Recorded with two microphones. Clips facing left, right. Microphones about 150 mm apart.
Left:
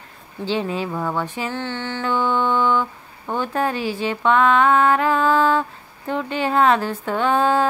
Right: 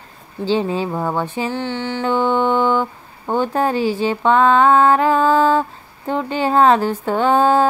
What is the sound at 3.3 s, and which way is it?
Speech, 30° right (ahead or behind).